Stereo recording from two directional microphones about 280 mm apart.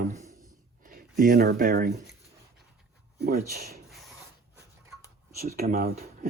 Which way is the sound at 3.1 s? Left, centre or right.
Right.